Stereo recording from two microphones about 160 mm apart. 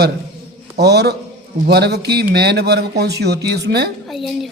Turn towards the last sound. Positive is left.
turn(degrees=0)  # may be behind; listen again after turning